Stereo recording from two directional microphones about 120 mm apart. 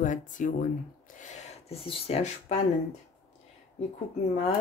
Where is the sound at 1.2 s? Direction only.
75° left (ahead or behind).